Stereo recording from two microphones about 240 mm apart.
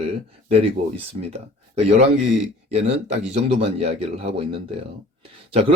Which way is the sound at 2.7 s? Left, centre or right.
Right.